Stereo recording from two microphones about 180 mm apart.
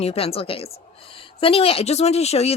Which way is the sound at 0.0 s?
35° left (ahead or behind).